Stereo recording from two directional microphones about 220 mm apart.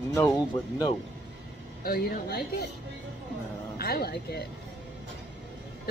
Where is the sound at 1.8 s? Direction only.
45° left (ahead or behind).